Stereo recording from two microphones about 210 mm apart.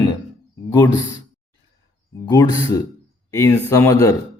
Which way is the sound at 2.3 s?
15° left (ahead or behind).